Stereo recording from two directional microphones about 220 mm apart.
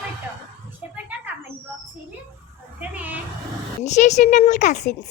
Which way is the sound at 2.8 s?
5° right (ahead or behind).